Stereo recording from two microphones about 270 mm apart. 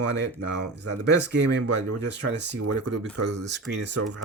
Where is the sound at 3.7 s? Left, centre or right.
Right.